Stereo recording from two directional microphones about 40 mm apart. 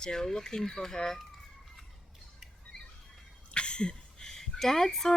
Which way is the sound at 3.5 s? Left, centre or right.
Left.